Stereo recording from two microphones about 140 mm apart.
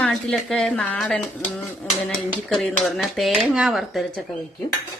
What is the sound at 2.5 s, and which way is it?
Speech, centre (ahead or behind).